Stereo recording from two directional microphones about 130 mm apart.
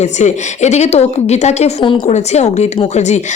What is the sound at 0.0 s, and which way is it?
A woman's voice, 65° left (ahead or behind).